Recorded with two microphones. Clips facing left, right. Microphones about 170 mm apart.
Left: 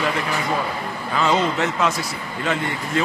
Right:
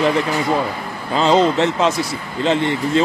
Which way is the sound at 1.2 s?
30° right (ahead or behind).